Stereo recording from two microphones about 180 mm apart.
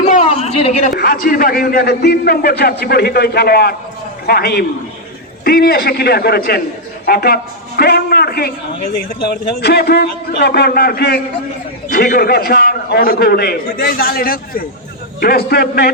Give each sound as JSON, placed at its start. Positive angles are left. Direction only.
{"t": 0.1, "sound": "a sound", "side_deg": 35}
{"t": 0.9, "sound": "a man's voice", "side_deg": 55}
{"t": 9.6, "sound": "a man's voice", "side_deg": 60}